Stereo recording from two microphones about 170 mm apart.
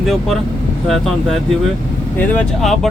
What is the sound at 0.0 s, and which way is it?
Speech, centre (ahead or behind).